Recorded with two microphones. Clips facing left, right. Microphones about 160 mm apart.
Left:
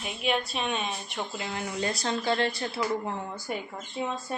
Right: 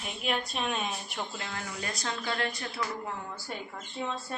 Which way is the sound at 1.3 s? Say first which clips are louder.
Left 6 dB; 15° left (ahead or behind).